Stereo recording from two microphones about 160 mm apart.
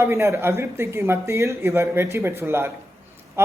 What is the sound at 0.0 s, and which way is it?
A man's voice, 15° right (ahead or behind).